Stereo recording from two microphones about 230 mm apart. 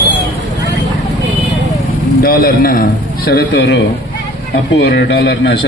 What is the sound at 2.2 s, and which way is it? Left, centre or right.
A man's voice, left.